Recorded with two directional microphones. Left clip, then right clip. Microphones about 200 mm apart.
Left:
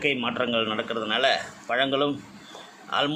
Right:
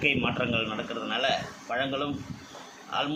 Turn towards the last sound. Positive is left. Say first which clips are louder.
# left 5 dB
turn(degrees=40)  # may be behind; listen again after turning